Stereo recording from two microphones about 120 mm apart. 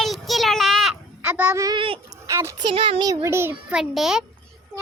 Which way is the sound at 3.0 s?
30° right (ahead or behind).